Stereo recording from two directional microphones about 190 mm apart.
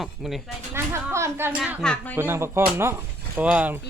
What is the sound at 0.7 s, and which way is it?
Speech, 15° right (ahead or behind).